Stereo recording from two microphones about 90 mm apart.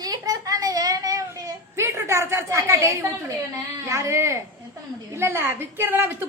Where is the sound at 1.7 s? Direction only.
30° right (ahead or behind).